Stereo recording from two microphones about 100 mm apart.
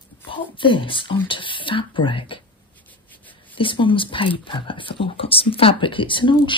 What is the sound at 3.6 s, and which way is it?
Speech, 55° left (ahead or behind).